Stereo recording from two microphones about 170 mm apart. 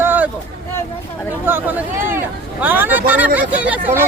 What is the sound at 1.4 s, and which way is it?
Speech, 10° right (ahead or behind).